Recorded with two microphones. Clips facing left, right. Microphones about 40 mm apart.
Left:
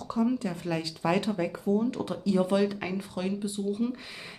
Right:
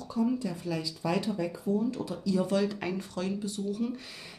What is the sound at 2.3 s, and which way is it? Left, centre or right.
Speech, left.